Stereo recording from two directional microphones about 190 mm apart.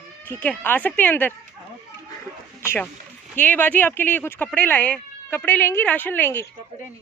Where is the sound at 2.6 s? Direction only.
10° left (ahead or behind).